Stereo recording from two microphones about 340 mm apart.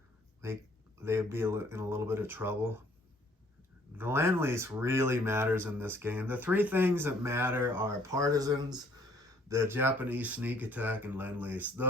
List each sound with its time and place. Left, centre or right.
0.4 s speech: centre
3.9 s speech: centre